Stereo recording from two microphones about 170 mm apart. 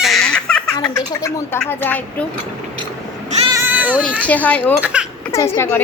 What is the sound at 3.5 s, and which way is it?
Cat, 15° right (ahead or behind).